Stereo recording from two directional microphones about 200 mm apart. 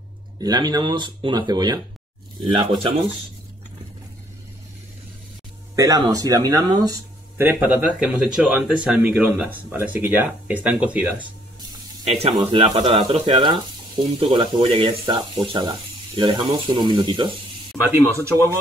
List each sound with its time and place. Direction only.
0.4 s speech: 20° right (ahead or behind)
5.8 s a man's voice: 15° right (ahead or behind)
11.1 s speech: 25° right (ahead or behind)
17.8 s speech: 15° right (ahead or behind)